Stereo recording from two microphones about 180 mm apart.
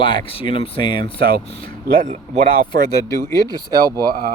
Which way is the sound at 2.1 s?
40° right (ahead or behind).